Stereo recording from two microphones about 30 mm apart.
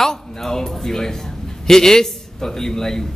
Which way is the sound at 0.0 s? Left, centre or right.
Centre.